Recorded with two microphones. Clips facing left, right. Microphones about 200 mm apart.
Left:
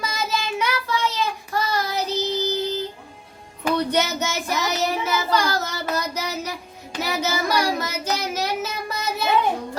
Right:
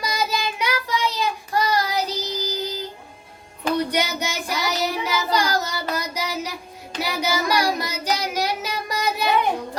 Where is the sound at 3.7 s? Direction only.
15° right (ahead or behind).